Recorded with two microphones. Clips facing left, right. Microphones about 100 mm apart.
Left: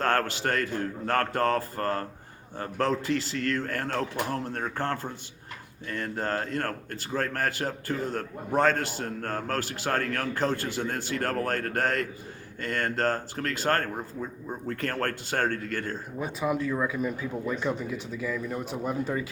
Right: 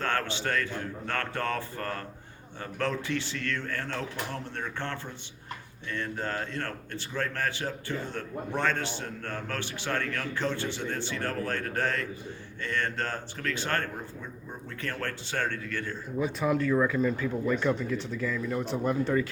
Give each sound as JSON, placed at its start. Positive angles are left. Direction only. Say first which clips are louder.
{"t": 0.2, "sound": "a man's voice", "louder": "left 3 dB", "side_deg": 45}
{"t": 12.8, "sound": "a man's voice", "louder": "left 5 dB", "side_deg": 40}
{"t": 16.4, "sound": "speech", "louder": "right 2 dB", "side_deg": 5}